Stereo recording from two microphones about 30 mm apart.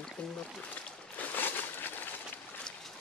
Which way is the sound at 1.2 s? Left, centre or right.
Left.